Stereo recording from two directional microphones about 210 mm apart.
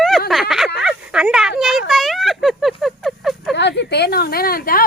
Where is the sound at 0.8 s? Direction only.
5° right (ahead or behind).